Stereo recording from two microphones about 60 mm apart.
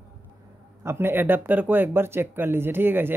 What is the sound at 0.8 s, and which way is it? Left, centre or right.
A man's voice, right.